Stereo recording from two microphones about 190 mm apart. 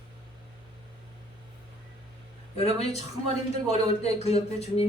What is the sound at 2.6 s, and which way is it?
A man's voice, 30° left (ahead or behind).